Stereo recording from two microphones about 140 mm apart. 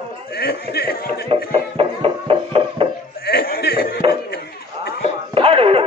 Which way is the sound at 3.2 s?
90° left.